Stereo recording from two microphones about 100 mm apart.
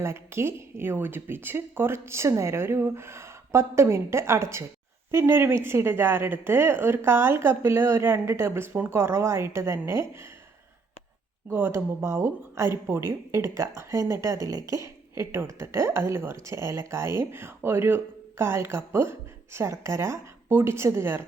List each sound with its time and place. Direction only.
0.0 s speech: 25° right (ahead or behind)
11.4 s speech: 25° right (ahead or behind)